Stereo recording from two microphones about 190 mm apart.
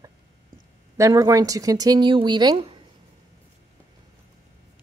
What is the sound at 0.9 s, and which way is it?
Speech, 15° right (ahead or behind).